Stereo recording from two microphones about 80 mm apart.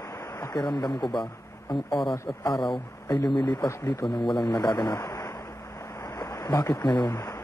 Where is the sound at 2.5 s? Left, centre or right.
Centre.